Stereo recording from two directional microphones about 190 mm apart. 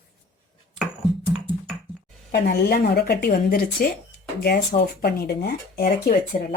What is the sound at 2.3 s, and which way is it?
Speech, 55° left (ahead or behind).